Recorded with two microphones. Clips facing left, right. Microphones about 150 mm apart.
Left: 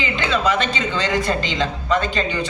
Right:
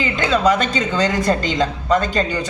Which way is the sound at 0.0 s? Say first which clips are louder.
Right 4 dB; 40° right (ahead or behind).